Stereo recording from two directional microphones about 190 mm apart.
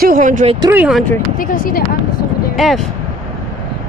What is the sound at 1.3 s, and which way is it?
Speech, 45° left (ahead or behind).